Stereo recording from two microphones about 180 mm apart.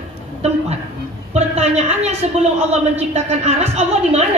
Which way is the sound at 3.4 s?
35° right (ahead or behind).